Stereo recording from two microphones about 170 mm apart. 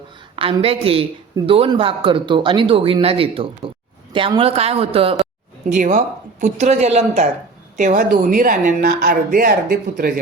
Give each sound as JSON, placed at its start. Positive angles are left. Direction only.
{"t": 0.3, "sound": "speech", "side_deg": -30}
{"t": 5.6, "sound": "speech", "side_deg": -50}
{"t": 7.8, "sound": "speech", "side_deg": -50}